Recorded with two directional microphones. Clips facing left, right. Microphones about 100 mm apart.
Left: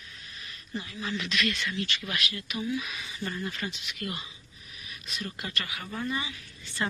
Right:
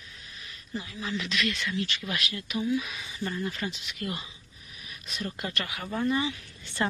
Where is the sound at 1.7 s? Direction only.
25° right (ahead or behind).